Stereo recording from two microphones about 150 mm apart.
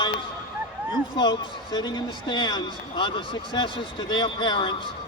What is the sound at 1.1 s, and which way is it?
A man's voice, 30° left (ahead or behind).